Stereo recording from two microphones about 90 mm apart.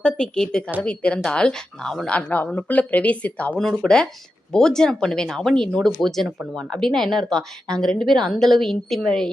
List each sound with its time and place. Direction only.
0.0 s a woman's voice: 10° left (ahead or behind)
2.1 s a woman's voice: 20° left (ahead or behind); by 9.3 s 5° left (ahead or behind)